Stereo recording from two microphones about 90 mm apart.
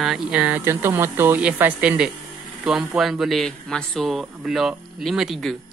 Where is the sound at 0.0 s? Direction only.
5° right (ahead or behind).